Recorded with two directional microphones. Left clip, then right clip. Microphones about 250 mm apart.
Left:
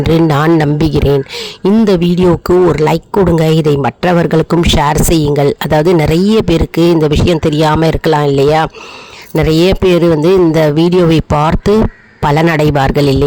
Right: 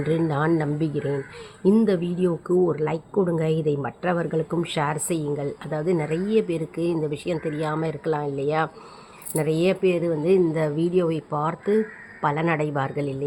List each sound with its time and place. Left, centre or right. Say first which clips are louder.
0.0 s a man's voice: left 13 dB; left